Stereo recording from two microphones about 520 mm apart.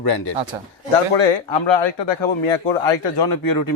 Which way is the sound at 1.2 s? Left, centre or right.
Left.